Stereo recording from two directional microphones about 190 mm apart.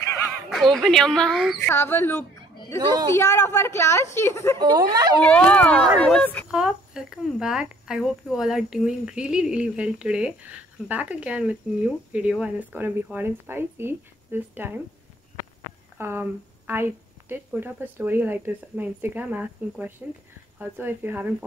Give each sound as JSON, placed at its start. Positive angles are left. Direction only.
{"t": 0.7, "sound": "speech", "side_deg": 0}
{"t": 1.7, "sound": "a woman's voice", "side_deg": 10}
{"t": 4.6, "sound": "speech", "side_deg": -20}
{"t": 5.2, "sound": "a woman's voice", "side_deg": 5}
{"t": 6.5, "sound": "speech", "side_deg": -5}
{"t": 16.0, "sound": "a woman's voice", "side_deg": -10}